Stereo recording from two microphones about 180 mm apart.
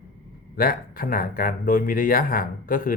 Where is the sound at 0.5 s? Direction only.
55° left (ahead or behind).